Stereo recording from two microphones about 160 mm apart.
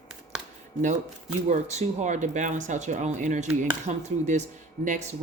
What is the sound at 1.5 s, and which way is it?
Speech, 45° right (ahead or behind).